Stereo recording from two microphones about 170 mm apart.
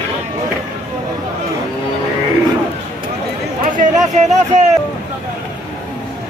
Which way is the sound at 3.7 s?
50° right (ahead or behind).